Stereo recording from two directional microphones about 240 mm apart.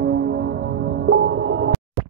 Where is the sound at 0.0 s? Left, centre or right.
Right.